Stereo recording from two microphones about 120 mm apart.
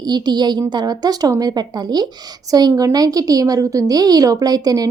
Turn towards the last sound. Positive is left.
turn(degrees=-30)  # may be behind; listen again after turning